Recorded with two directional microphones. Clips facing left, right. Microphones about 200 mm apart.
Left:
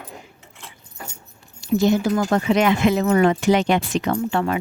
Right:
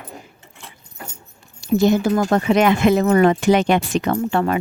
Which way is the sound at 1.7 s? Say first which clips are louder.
Right 2 dB; 55° right (ahead or behind).